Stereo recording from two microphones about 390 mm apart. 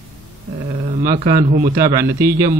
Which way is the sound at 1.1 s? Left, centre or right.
Centre.